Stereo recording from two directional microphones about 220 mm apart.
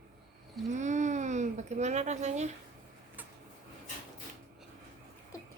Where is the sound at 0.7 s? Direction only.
35° right (ahead or behind).